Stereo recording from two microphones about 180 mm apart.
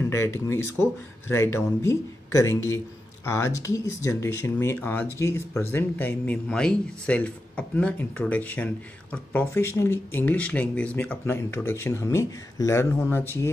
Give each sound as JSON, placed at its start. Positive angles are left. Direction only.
{"t": 0.0, "sound": "speech", "side_deg": 15}